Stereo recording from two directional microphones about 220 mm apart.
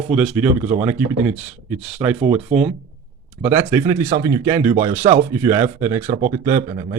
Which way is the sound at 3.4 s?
10° right (ahead or behind).